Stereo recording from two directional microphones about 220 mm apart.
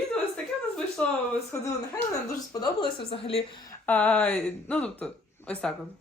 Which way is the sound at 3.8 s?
5° left (ahead or behind).